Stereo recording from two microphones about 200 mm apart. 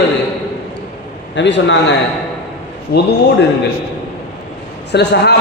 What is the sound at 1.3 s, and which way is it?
Speech, 65° left (ahead or behind).